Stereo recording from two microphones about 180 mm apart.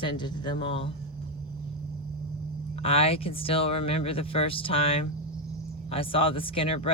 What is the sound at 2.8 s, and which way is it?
Speech, 35° left (ahead or behind).